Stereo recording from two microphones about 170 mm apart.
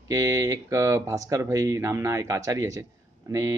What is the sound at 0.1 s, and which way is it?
Speech, 20° right (ahead or behind).